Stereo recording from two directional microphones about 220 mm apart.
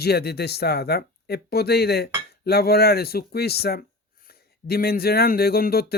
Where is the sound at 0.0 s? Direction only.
45° left (ahead or behind).